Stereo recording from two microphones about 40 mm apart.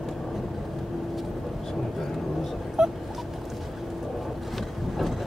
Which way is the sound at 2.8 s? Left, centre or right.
Centre.